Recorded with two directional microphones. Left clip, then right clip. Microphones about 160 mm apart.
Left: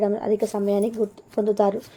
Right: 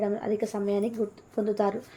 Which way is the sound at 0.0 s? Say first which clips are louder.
Left 6 dB; 45° left (ahead or behind).